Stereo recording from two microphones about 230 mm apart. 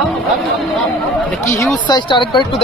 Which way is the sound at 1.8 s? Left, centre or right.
Centre.